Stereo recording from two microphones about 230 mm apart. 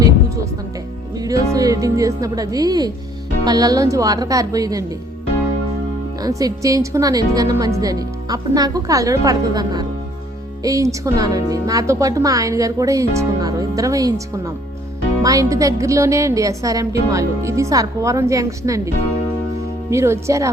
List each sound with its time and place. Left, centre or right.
1.2 s speech: centre
6.2 s speech: centre
15.2 s speech: centre
19.9 s speech: centre